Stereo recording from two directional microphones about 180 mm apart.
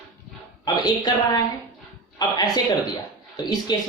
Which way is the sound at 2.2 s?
20° left (ahead or behind).